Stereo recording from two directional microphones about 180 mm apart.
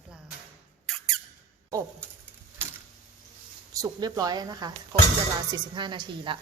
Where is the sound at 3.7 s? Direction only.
20° right (ahead or behind).